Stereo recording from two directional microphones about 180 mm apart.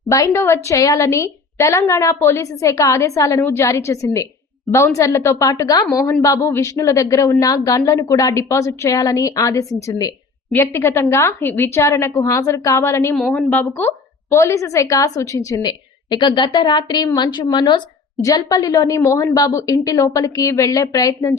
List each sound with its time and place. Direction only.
0.1 s a woman's voice: 15° left (ahead or behind)